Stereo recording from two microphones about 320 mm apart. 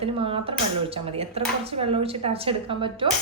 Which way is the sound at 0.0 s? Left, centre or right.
Centre.